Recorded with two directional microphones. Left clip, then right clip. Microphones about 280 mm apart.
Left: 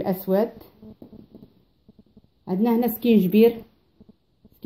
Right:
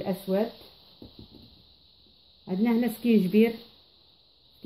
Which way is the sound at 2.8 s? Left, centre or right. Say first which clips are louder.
Left 5 dB; left.